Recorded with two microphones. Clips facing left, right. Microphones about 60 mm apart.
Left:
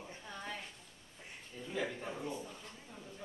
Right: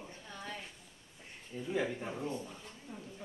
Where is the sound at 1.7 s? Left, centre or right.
Centre.